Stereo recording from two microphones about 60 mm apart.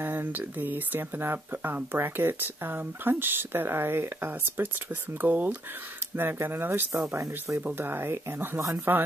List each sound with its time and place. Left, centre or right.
0.0 s speech: right
7.2 s speech: right
7.6 s speech: right